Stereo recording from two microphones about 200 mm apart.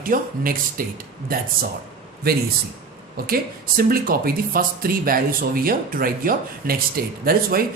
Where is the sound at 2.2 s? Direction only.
50° right (ahead or behind).